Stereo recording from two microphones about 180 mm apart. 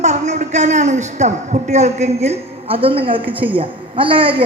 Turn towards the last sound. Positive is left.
turn(degrees=-30)  # may be behind; listen again after turning